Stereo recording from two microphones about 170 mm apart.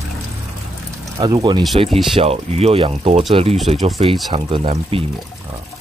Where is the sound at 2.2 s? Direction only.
35° right (ahead or behind).